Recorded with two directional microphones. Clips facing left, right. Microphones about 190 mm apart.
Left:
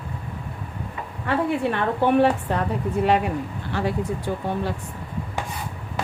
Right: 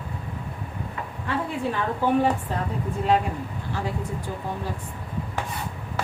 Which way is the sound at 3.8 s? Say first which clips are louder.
Left 6 dB; 70° left (ahead or behind).